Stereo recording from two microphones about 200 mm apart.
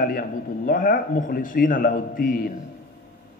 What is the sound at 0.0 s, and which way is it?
A man's voice, 45° left (ahead or behind).